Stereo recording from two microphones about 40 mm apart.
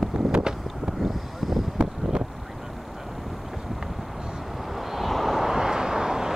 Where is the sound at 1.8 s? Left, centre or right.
Centre.